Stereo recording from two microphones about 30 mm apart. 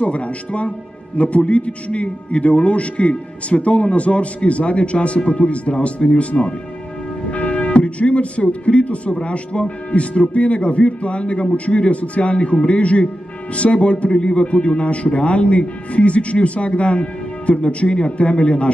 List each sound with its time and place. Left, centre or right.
0.0 s a man's voice: left